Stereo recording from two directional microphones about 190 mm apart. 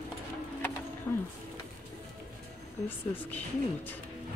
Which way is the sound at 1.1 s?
10° left (ahead or behind).